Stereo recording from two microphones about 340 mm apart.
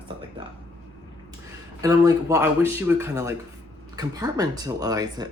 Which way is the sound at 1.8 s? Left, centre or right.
Centre.